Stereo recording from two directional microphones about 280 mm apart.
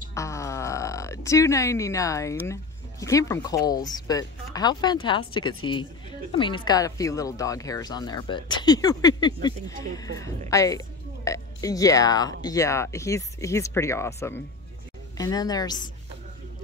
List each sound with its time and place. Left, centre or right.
0.1 s speech: centre